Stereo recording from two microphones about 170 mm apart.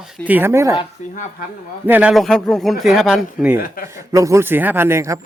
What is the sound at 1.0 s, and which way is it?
Speech, 45° left (ahead or behind).